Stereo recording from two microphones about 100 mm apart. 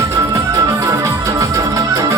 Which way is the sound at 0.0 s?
35° right (ahead or behind).